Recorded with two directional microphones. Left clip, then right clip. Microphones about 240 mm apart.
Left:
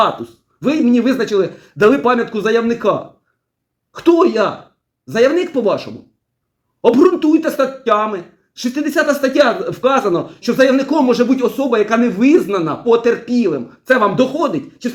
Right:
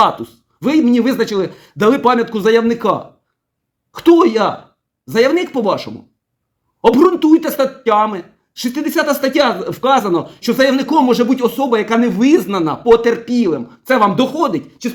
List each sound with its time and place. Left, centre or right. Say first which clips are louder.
0.3 s speech: even; right
3.9 s speech: right 2 dB; right
6.9 s speech: right 1 dB; right